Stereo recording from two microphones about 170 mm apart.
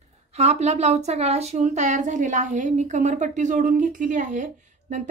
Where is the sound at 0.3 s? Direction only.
40° right (ahead or behind).